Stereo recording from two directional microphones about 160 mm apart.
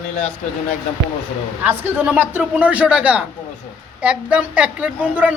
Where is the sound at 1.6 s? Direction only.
10° right (ahead or behind).